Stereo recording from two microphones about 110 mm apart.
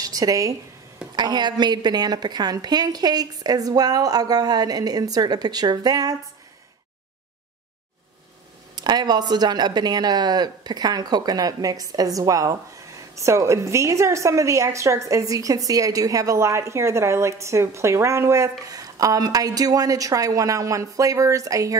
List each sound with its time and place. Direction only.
0.0 s a woman's voice: 35° right (ahead or behind)
8.7 s a woman's voice: 40° right (ahead or behind)